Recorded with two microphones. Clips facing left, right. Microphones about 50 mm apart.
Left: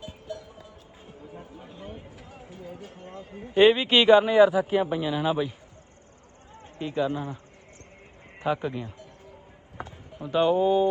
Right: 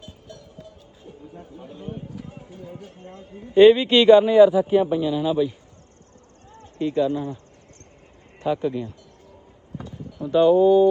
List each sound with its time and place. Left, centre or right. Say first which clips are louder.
3.5 s speech: right 6 dB; centre
8.4 s speech: right 4 dB; centre
9.7 s a sound: right 4 dB; left
10.2 s speech: right 6 dB; left